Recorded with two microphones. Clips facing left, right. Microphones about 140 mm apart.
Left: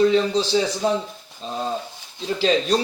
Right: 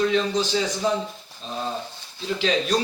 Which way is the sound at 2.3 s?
30° left (ahead or behind).